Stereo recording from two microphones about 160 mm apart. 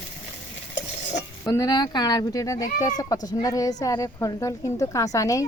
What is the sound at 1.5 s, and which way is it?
A woman's voice, 25° left (ahead or behind).